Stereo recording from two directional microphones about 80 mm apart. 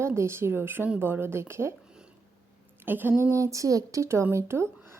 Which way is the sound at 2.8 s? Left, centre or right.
Right.